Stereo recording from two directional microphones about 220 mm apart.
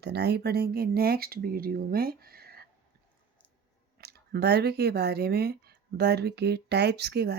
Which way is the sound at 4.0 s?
45° right (ahead or behind).